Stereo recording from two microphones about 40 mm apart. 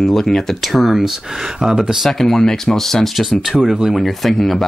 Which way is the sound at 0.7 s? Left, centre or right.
Centre.